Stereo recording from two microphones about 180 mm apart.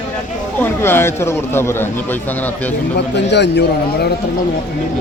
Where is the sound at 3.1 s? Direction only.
70° left (ahead or behind).